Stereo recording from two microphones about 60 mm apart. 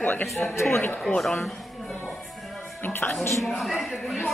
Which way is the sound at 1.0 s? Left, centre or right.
Centre.